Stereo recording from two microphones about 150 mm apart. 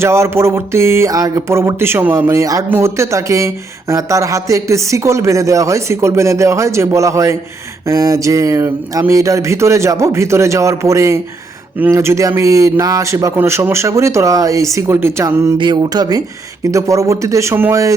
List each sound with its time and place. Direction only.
0.0 s a sound: 20° right (ahead or behind)
2.6 s speech: 15° right (ahead or behind)
15.5 s speech: 30° right (ahead or behind)